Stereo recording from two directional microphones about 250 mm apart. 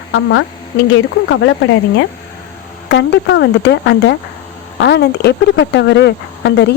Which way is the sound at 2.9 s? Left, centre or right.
Left.